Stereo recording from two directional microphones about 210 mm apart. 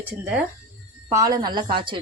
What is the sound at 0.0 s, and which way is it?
Speech, 5° right (ahead or behind).